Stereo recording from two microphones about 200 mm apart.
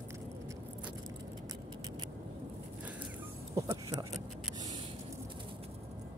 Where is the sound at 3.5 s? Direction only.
15° right (ahead or behind).